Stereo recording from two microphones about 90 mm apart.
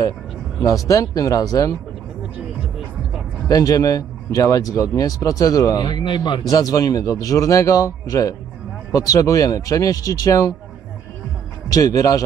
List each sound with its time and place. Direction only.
0.8 s a man's voice: 40° left (ahead or behind)
3.4 s a man's voice: 45° left (ahead or behind); by 6.4 s 60° left (ahead or behind)
6.5 s a man's voice: 40° left (ahead or behind)
11.7 s a man's voice: 40° left (ahead or behind)